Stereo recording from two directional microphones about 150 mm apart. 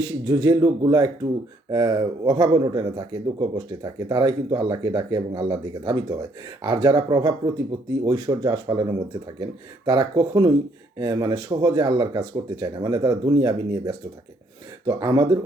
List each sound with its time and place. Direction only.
0.0 s speech: 25° right (ahead or behind)